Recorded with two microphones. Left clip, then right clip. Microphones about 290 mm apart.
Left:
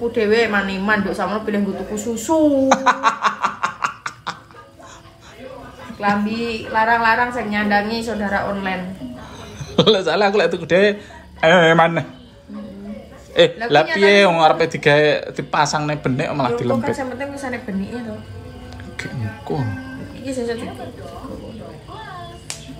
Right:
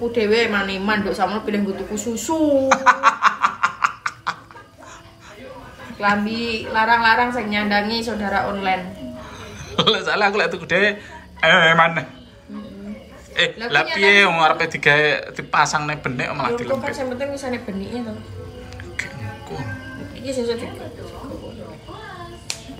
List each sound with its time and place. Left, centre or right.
0.1 s a woman's voice: centre
5.9 s a woman's voice: centre
9.8 s speech: centre
13.3 s speech: centre
16.9 s a woman's voice: centre
18.9 s music: centre
20.2 s a woman's voice: centre